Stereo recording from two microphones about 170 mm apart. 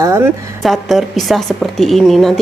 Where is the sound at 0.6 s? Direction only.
Centre (ahead or behind).